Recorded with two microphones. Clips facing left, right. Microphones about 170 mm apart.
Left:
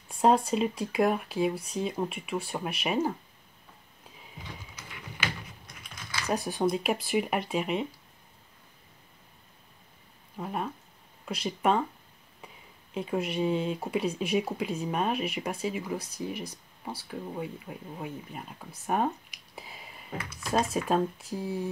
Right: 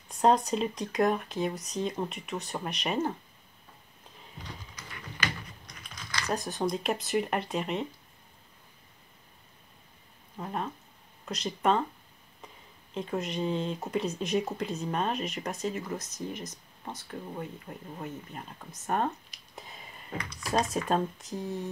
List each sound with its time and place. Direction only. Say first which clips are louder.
0.1 s speech: left 1 dB; 5° left (ahead or behind)
4.7 s a sound: right 2 dB; 10° left (ahead or behind)
6.1 s speech: left 2 dB; 10° left (ahead or behind)
10.3 s speech: left 1 dB; 5° left (ahead or behind)
12.9 s speech: left 2 dB; 5° left (ahead or behind)